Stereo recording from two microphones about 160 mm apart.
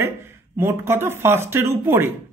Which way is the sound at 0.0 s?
15° right (ahead or behind).